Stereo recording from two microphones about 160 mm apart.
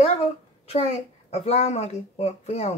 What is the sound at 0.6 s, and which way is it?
A woman's voice, 40° left (ahead or behind).